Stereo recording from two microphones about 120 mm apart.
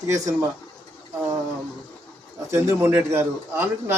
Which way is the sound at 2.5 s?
20° right (ahead or behind).